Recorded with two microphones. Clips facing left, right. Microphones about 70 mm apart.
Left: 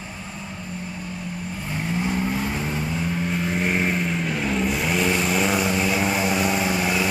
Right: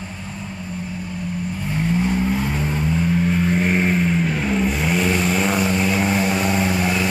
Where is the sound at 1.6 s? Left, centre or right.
Centre.